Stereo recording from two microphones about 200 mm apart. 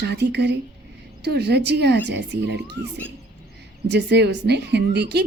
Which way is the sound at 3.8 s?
60° right (ahead or behind).